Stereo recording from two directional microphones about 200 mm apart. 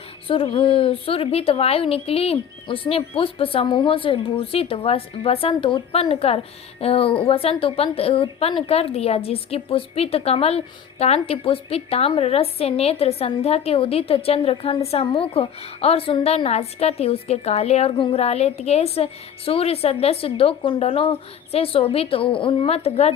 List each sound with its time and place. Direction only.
0.3 s a woman's voice: 25° left (ahead or behind)